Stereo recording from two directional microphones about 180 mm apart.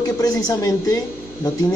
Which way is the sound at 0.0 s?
20° left (ahead or behind).